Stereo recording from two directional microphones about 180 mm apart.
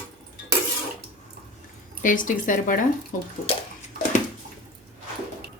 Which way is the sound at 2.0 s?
45° left (ahead or behind).